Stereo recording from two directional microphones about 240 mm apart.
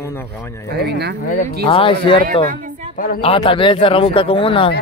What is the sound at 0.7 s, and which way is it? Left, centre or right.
Speech, right.